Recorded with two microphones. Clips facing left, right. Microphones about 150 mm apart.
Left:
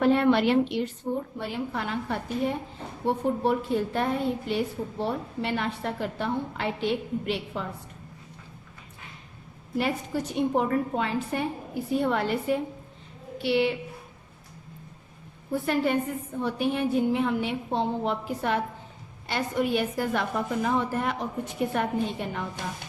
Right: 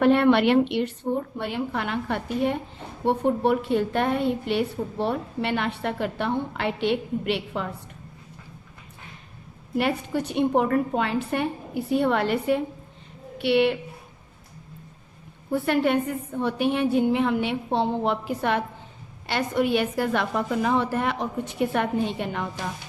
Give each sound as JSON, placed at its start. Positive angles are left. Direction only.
{"t": 0.0, "sound": "a woman's voice", "side_deg": -65}
{"t": 9.7, "sound": "a woman's voice", "side_deg": -70}
{"t": 15.6, "sound": "a woman's voice", "side_deg": -70}